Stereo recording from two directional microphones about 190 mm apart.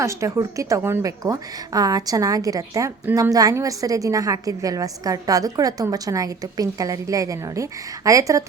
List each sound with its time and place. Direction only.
0.0 s a woman's voice: 15° right (ahead or behind)